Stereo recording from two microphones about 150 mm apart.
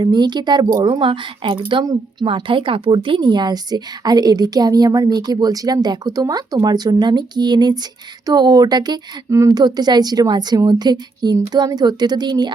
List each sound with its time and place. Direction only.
0.0 s speech: 30° right (ahead or behind)